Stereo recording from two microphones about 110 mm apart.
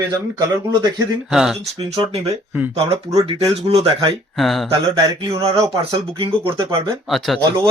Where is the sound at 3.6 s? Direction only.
70° right (ahead or behind).